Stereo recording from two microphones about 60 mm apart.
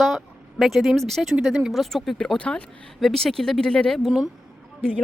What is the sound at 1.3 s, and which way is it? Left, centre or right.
Speech, centre.